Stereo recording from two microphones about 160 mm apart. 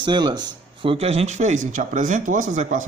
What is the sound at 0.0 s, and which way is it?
Speech, 30° right (ahead or behind).